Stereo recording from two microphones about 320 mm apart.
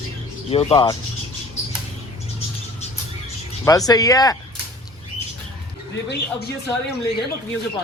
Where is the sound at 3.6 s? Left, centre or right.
Centre.